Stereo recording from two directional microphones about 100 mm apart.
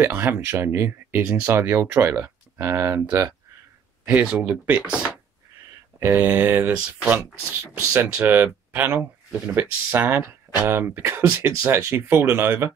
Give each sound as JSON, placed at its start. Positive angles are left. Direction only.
{"t": 0.0, "sound": "speech", "side_deg": -20}
{"t": 4.0, "sound": "speech", "side_deg": -10}
{"t": 5.9, "sound": "speech", "side_deg": -25}